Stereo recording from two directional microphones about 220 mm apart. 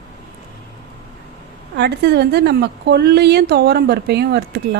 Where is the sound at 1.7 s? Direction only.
50° right (ahead or behind).